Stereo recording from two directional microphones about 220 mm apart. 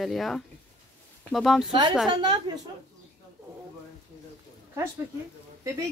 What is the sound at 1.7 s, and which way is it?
Speech, 20° right (ahead or behind).